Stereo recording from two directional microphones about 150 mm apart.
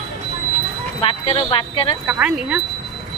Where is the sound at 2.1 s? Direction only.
10° right (ahead or behind).